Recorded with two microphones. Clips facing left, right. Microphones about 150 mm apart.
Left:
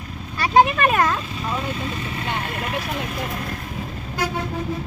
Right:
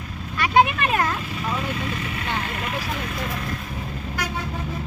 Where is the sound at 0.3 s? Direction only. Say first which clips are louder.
Left 2 dB; 35° left (ahead or behind).